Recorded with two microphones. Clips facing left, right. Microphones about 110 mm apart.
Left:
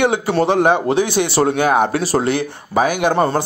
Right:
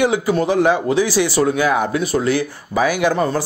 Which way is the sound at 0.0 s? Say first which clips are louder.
Left 1 dB; 65° left (ahead or behind).